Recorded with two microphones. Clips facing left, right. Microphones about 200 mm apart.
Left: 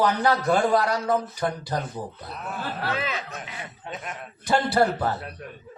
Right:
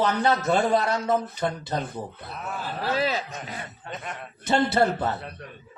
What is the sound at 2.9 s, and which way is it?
Speech, 35° right (ahead or behind).